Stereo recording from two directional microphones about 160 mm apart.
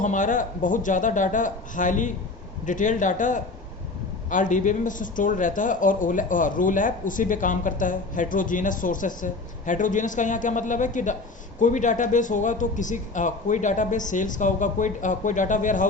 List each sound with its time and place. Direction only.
0.0 s a man's voice: 55° left (ahead or behind)